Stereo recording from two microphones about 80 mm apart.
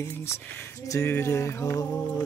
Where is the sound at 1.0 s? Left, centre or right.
Left.